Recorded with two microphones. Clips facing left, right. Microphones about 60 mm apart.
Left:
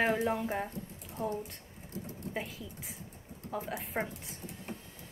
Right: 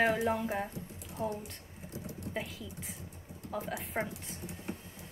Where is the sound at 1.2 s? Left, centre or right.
Centre.